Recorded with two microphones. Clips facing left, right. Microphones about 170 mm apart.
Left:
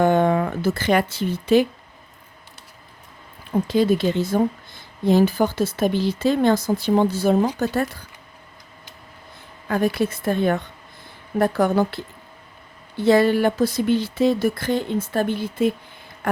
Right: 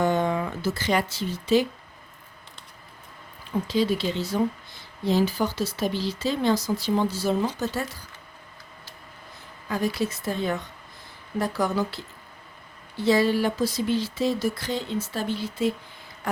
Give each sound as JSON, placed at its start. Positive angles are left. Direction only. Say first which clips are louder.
{"t": 0.0, "sound": "speech", "louder": "left 6 dB", "side_deg": 55}
{"t": 3.7, "sound": "speech", "louder": "left 6 dB", "side_deg": 50}
{"t": 9.6, "sound": "speech", "louder": "left 5 dB", "side_deg": 55}
{"t": 16.2, "sound": "a sound", "louder": "left 6 dB", "side_deg": 55}